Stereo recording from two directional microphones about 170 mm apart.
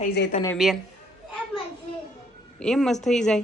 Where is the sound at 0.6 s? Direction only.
Centre (ahead or behind).